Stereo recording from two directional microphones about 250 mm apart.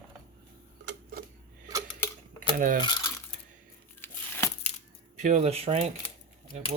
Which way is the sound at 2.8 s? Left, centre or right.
Centre.